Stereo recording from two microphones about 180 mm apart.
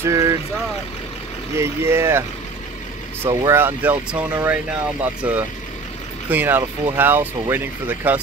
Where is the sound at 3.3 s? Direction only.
15° right (ahead or behind).